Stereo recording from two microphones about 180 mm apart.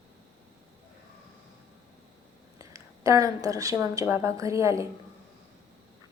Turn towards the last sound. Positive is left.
turn(degrees=-15)  # may be behind; listen again after turning